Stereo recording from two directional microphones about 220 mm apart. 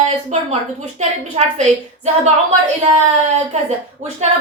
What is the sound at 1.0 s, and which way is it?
A woman's voice, 30° right (ahead or behind).